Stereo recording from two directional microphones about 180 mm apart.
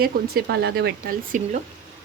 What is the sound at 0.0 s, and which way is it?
Speech, 60° right (ahead or behind).